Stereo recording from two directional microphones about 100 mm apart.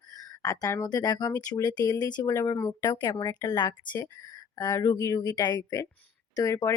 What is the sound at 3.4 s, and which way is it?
Speech, 45° left (ahead or behind).